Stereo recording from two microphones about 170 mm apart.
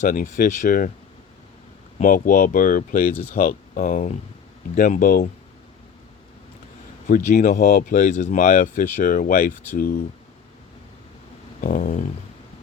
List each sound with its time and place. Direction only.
0.0 s speech: 50° left (ahead or behind)
2.0 s speech: 55° left (ahead or behind)
7.1 s speech: 50° left (ahead or behind)
11.6 s speech: 55° left (ahead or behind)